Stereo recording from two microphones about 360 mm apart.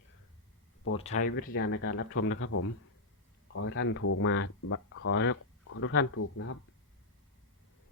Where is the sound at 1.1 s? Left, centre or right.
Left.